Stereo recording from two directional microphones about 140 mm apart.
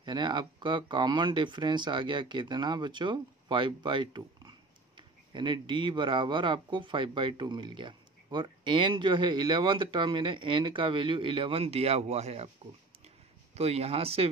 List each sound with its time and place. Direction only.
0.0 s speech: 30° right (ahead or behind); by 12.4 s 50° right (ahead or behind)
13.6 s speech: 50° right (ahead or behind)